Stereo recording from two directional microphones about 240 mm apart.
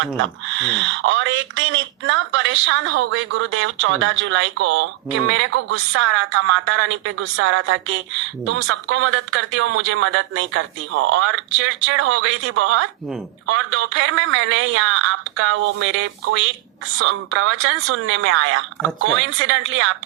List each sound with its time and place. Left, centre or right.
0.7 s a woman's voice: right